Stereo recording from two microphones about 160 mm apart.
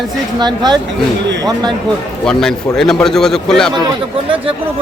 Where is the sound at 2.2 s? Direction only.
5° left (ahead or behind).